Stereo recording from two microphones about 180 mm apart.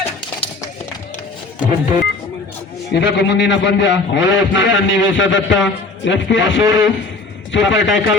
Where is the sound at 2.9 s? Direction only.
75° left (ahead or behind); by 8.1 s 90° left.